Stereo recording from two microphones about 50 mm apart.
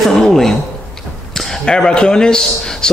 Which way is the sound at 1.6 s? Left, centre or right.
Centre.